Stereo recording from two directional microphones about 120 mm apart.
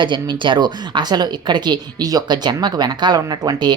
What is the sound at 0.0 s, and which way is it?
A woman's voice, 40° right (ahead or behind).